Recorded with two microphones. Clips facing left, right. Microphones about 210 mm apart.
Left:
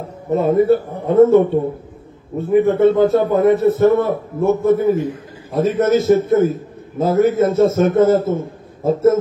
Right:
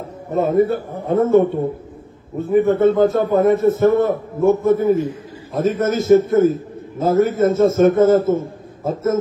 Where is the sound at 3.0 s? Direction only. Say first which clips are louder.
Left 1 dB; 50° right (ahead or behind).